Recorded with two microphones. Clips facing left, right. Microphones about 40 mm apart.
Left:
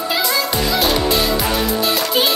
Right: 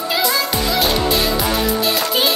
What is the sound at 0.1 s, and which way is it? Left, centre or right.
Music, centre.